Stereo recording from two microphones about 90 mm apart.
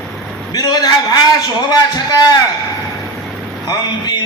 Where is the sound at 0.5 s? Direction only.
45° left (ahead or behind).